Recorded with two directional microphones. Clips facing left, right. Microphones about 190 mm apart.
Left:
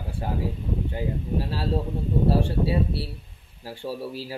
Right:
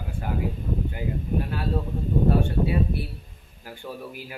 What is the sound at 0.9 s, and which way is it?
Speech, 30° left (ahead or behind).